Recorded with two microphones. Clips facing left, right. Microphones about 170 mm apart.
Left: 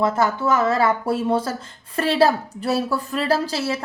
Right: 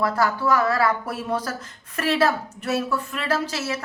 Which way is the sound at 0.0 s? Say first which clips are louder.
Left 2 dB; 25° left (ahead or behind).